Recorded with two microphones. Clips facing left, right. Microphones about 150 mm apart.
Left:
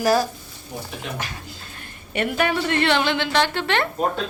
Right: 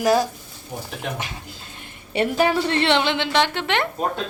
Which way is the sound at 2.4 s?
30° right (ahead or behind).